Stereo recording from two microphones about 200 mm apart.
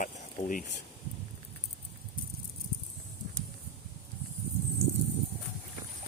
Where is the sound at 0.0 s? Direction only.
40° left (ahead or behind).